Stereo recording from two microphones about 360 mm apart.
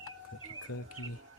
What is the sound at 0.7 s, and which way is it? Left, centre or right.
Speech, left.